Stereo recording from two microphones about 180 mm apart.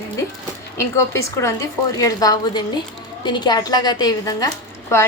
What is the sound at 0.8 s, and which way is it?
A woman's voice, 15° left (ahead or behind).